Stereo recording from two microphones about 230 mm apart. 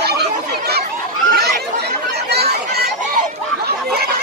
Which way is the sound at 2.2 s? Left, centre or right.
Right.